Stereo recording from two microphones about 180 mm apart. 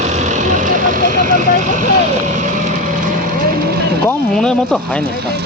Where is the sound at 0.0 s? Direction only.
40° right (ahead or behind).